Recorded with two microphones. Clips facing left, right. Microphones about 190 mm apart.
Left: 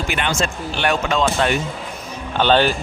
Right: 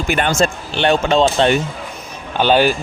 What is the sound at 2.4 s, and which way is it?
Speech, 10° right (ahead or behind).